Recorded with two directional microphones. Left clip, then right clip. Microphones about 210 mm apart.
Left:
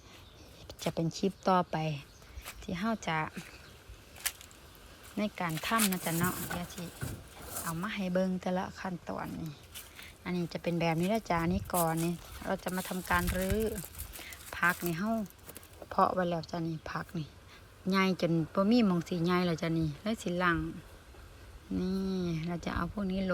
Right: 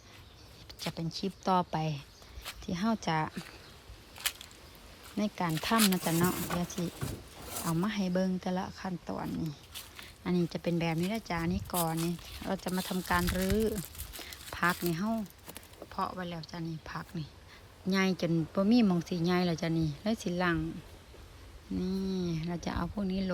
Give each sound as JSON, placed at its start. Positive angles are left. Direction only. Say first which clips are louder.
{"t": 0.7, "sound": "speech", "louder": "left 4 dB", "side_deg": 0}
{"t": 5.1, "sound": "speech", "louder": "right 1 dB", "side_deg": -10}
{"t": 6.6, "sound": "speech", "louder": "right 5 dB", "side_deg": -25}
{"t": 21.8, "sound": "speech", "louder": "even", "side_deg": -10}